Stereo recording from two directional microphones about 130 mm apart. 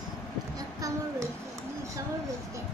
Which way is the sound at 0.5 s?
25° right (ahead or behind).